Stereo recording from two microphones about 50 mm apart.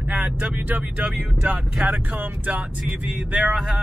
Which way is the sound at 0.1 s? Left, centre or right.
Centre.